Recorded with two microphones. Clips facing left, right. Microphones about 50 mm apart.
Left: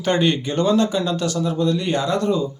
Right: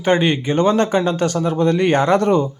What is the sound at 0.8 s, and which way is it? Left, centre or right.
Speech, right.